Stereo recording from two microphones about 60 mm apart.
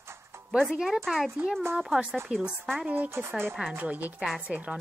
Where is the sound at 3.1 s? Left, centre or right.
Right.